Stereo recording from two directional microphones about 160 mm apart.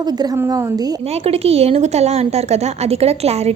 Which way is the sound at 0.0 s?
25° right (ahead or behind).